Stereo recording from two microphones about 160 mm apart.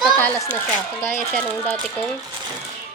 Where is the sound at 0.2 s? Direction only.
10° left (ahead or behind).